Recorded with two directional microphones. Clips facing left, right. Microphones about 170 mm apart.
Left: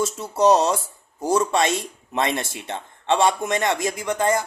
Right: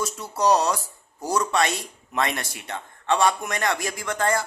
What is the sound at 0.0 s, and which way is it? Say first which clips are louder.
Speech: left 5 dB; 25° left (ahead or behind).